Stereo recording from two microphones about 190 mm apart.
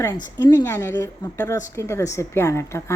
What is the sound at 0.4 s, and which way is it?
A woman's voice, 20° left (ahead or behind).